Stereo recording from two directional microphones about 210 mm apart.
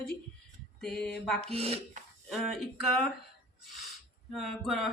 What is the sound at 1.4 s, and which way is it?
Speech, 30° right (ahead or behind).